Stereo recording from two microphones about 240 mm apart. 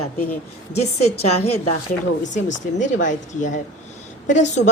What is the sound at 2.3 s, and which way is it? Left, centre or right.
A woman's voice, left.